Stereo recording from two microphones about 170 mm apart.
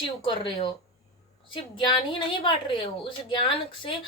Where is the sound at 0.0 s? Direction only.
30° left (ahead or behind).